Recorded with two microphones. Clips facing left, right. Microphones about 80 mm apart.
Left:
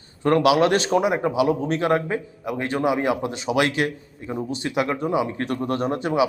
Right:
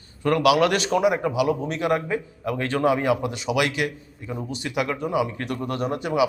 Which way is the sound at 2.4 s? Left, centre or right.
Centre.